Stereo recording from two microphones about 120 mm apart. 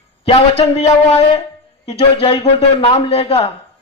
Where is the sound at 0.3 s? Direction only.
60° left (ahead or behind).